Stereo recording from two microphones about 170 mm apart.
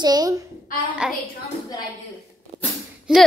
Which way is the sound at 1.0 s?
5° right (ahead or behind).